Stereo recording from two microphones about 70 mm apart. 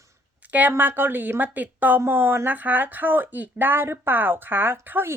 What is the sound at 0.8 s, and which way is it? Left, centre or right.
Speech, right.